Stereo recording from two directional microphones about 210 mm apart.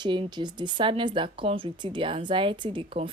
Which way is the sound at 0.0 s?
20° right (ahead or behind).